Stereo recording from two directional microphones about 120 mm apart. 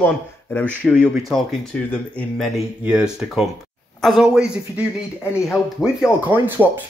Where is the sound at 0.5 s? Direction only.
20° left (ahead or behind).